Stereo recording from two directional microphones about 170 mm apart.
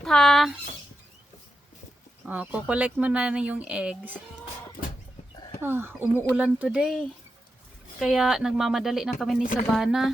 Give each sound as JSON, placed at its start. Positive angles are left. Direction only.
{"t": 0.0, "sound": "speech", "side_deg": 5}
{"t": 2.2, "sound": "speech", "side_deg": -10}
{"t": 5.6, "sound": "speech", "side_deg": -15}